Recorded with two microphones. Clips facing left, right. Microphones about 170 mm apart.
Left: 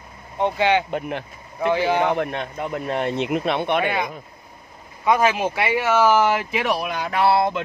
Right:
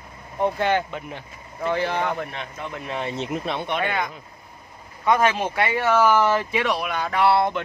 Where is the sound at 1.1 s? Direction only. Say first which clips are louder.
Left 7 dB; 75° left (ahead or behind).